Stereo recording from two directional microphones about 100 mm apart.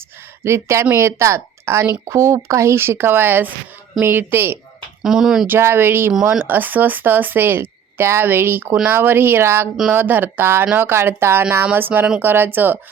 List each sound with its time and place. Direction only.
0.4 s a woman's voice: 25° right (ahead or behind)
5.0 s speech: 5° right (ahead or behind)
5.5 s a woman's voice: 25° right (ahead or behind)
6.1 s speech: 5° right (ahead or behind)
6.4 s a woman's voice: 20° right (ahead or behind)